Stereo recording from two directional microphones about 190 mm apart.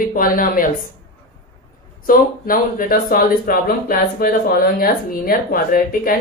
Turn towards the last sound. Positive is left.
turn(degrees=50)  # may be behind; listen again after turning